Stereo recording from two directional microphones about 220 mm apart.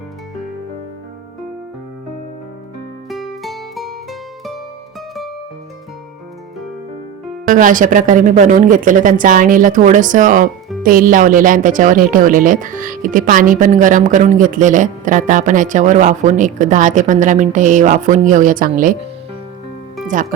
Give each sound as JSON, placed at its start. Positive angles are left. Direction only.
{"t": 3.1, "sound": "music", "side_deg": 0}
{"t": 7.4, "sound": "speech", "side_deg": -35}
{"t": 20.1, "sound": "speech", "side_deg": -35}